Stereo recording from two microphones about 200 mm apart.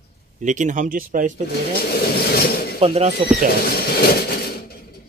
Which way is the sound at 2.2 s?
50° left (ahead or behind).